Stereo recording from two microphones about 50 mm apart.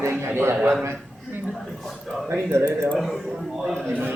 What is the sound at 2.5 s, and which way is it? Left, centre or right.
Speech, right.